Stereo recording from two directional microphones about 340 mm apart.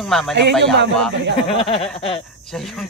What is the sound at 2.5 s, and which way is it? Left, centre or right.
Speech, centre.